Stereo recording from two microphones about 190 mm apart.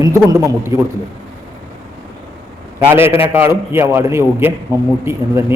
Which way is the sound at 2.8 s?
10° right (ahead or behind).